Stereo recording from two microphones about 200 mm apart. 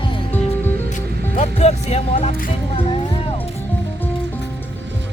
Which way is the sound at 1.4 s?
35° left (ahead or behind).